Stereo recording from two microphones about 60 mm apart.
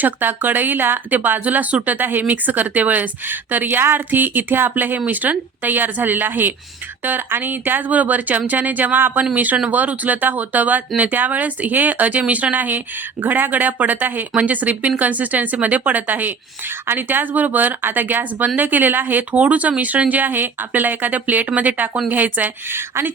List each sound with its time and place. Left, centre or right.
0.0 s speech: right